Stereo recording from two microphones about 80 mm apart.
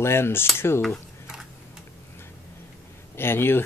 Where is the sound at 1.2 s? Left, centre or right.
Centre.